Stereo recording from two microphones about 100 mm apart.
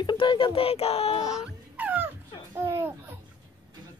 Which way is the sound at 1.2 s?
10° right (ahead or behind).